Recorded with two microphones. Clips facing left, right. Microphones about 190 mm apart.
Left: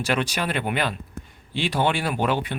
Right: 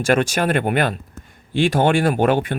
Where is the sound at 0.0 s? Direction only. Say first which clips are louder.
Right 7 dB; 45° right (ahead or behind).